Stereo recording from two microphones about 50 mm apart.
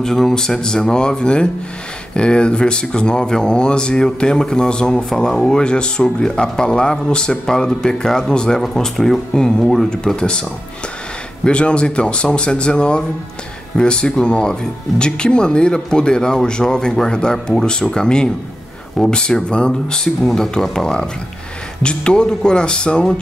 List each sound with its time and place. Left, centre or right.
0.0 s speech: centre
11.4 s speech: left